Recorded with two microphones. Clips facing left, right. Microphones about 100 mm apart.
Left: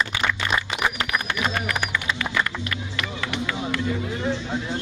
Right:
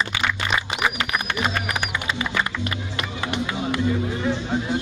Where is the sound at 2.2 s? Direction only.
15° right (ahead or behind).